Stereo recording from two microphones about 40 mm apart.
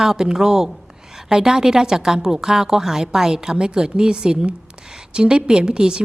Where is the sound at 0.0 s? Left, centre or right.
Centre.